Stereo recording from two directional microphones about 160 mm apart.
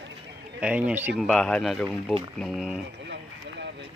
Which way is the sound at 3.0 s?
90° right.